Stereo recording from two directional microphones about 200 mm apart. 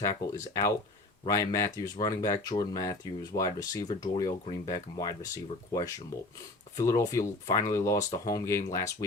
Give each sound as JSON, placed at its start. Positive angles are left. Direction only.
{"t": 0.0, "sound": "speech", "side_deg": 15}